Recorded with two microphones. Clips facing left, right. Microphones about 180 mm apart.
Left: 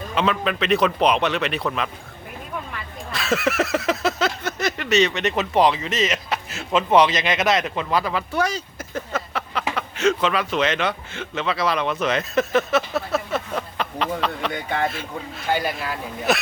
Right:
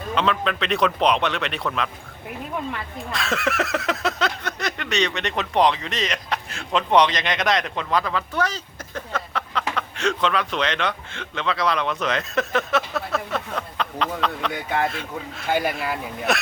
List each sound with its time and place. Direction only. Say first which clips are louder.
0.1 s speech: even; 5° left (ahead or behind)
3.1 s a sound: left 3 dB; 5° left (ahead or behind)
13.1 s speech: left 2 dB; 5° left (ahead or behind)